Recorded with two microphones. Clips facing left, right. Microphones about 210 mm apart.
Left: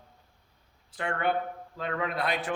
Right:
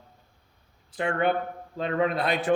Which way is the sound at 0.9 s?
20° right (ahead or behind).